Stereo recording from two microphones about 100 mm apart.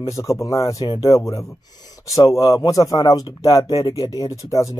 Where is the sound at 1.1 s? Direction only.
30° left (ahead or behind).